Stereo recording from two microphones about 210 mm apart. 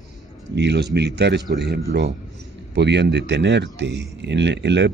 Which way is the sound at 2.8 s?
55° right (ahead or behind).